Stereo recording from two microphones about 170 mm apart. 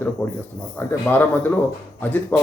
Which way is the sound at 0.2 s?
20° left (ahead or behind).